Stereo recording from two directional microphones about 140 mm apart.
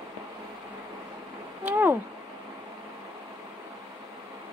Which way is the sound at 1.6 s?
15° right (ahead or behind).